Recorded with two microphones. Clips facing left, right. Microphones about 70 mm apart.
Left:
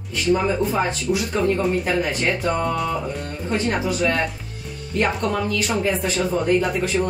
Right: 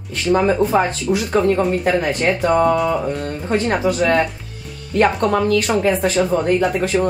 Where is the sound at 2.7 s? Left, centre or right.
Centre.